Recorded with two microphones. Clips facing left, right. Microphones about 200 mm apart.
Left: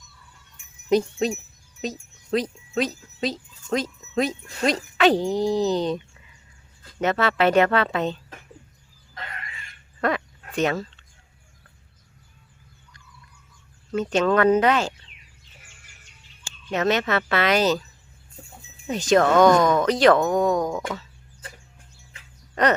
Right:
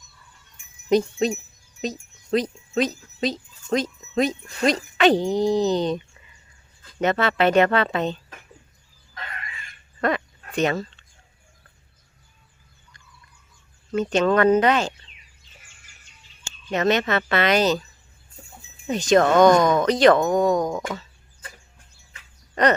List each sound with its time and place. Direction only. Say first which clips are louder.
0.9 s speech: right 1 dB; 5° left (ahead or behind)
10.0 s a sound: right 1 dB; 5° left (ahead or behind)
13.9 s speech: right 1 dB; 5° left (ahead or behind)
16.6 s speech: right 1 dB; 5° left (ahead or behind)
18.9 s speech: right 1 dB; 5° left (ahead or behind)
19.2 s speech: right 1 dB; 15° right (ahead or behind)
19.8 s speech: right 1 dB; 5° left (ahead or behind)
20.3 s speech: right 1 dB; 15° right (ahead or behind)